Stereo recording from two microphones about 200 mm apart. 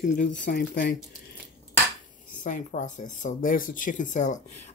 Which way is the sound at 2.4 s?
40° left (ahead or behind).